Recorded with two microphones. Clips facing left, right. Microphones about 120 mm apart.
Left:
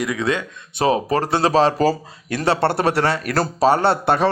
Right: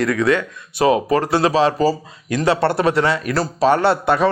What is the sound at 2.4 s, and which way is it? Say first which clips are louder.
Speech: right 1 dB; 30° left (ahead or behind).